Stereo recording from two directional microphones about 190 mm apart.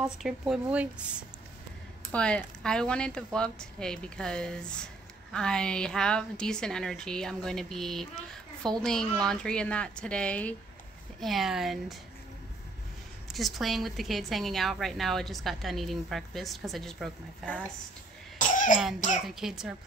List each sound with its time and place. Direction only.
0.0 s a woman's voice: 5° right (ahead or behind)
2.1 s a woman's voice: 5° left (ahead or behind)
13.3 s a woman's voice: centre (ahead or behind)
18.4 s cough: 40° left (ahead or behind)
19.2 s a woman's voice: centre (ahead or behind)